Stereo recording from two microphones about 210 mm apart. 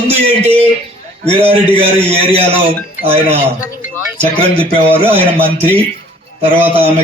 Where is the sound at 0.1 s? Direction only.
30° right (ahead or behind).